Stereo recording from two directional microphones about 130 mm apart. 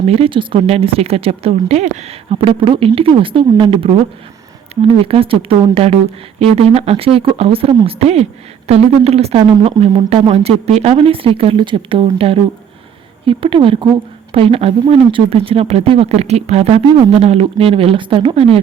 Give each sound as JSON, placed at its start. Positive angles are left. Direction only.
{"t": 0.1, "sound": "speech", "side_deg": -45}